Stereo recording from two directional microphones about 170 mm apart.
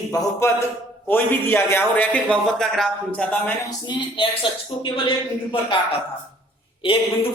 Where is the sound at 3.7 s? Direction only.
30° left (ahead or behind).